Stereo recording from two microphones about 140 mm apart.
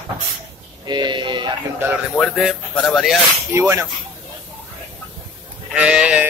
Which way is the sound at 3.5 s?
20° right (ahead or behind).